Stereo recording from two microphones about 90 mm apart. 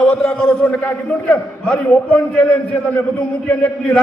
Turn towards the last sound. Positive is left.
turn(degrees=15)  # may be behind; listen again after turning